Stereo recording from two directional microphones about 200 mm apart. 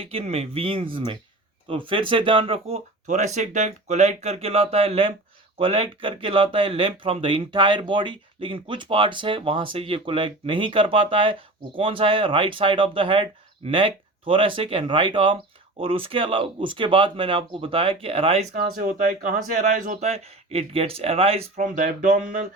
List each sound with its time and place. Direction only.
0.0 s speech: 30° right (ahead or behind)